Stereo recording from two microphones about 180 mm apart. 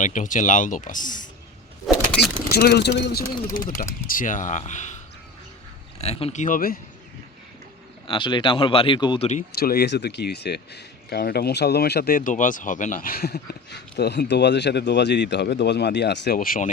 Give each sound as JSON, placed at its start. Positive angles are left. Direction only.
{"t": 0.0, "sound": "speech", "side_deg": 45}
{"t": 1.9, "sound": "vehicle", "side_deg": 0}
{"t": 2.5, "sound": "speech", "side_deg": 60}
{"t": 3.4, "sound": "speech", "side_deg": 20}
{"t": 4.1, "sound": "speech", "side_deg": 50}
{"t": 6.0, "sound": "speech", "side_deg": 35}
{"t": 8.0, "sound": "speech", "side_deg": 30}
{"t": 9.6, "sound": "speech", "side_deg": 60}